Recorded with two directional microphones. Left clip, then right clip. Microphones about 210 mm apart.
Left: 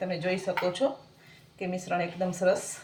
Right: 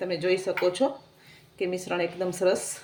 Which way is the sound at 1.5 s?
45° right (ahead or behind).